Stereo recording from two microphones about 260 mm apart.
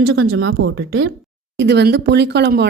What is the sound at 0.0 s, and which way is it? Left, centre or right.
Speech, right.